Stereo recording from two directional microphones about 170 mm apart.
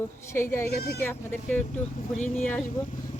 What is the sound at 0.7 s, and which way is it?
Speech, 65° left (ahead or behind).